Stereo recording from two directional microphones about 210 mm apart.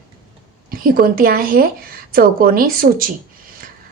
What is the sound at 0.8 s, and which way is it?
A woman's voice, 45° right (ahead or behind).